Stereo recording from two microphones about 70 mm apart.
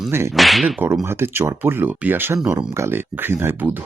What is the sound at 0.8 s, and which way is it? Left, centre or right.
Speech, right.